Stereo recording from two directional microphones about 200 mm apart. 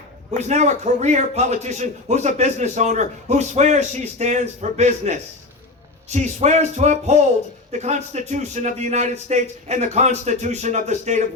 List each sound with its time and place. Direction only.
0.4 s a man's voice: 35° right (ahead or behind)